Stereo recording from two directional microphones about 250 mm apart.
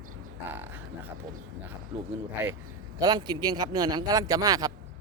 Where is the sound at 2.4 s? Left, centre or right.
Centre.